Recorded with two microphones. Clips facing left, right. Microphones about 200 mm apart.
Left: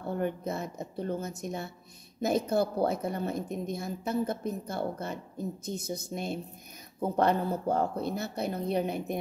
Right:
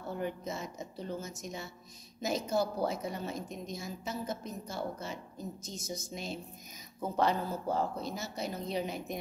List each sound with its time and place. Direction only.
0.1 s a woman's voice: 55° left (ahead or behind)